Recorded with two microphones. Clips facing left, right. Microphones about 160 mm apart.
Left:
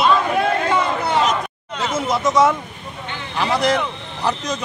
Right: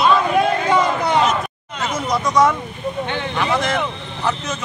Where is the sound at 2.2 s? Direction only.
25° left (ahead or behind).